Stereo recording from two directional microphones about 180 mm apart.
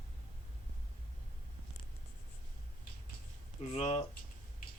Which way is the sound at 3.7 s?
35° left (ahead or behind).